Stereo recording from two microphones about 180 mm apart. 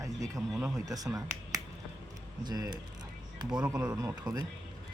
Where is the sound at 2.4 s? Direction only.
20° right (ahead or behind).